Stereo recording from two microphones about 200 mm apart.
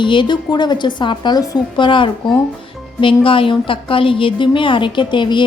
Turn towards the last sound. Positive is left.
turn(degrees=25)  # may be behind; listen again after turning